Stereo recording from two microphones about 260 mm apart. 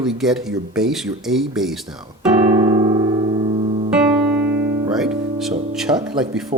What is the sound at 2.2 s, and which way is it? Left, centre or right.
Music, centre.